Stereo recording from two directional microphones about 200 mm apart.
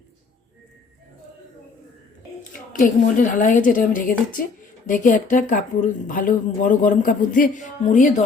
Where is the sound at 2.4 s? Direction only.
40° left (ahead or behind).